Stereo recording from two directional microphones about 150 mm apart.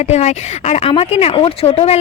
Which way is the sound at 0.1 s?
50° left (ahead or behind).